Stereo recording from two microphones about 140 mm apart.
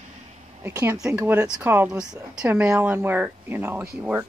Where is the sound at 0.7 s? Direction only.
20° right (ahead or behind).